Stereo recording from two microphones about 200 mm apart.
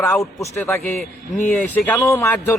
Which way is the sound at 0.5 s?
10° left (ahead or behind).